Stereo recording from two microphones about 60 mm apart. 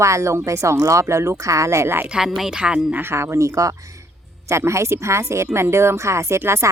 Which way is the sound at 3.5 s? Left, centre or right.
Right.